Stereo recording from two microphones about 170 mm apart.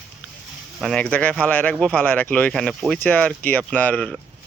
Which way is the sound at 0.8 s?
5° left (ahead or behind).